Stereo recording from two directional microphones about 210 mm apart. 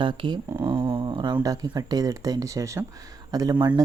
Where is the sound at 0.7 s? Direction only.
25° right (ahead or behind).